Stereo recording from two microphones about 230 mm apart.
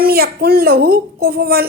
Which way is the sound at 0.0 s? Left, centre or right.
Right.